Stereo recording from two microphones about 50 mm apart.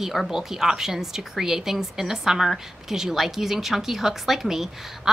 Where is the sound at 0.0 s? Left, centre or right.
Centre.